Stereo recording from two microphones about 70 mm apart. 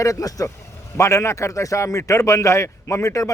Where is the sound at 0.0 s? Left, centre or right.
Left.